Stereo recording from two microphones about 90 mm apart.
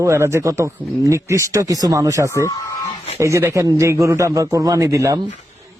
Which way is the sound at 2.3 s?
35° left (ahead or behind).